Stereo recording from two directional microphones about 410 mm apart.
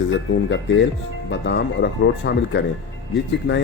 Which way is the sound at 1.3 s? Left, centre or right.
Left.